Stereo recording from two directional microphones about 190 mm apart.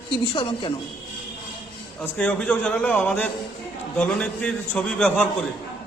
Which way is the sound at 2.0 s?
5° left (ahead or behind).